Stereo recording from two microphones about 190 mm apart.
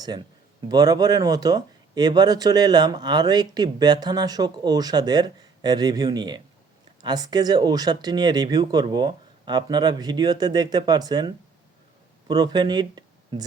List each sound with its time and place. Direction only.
0.0 s speech: 20° right (ahead or behind)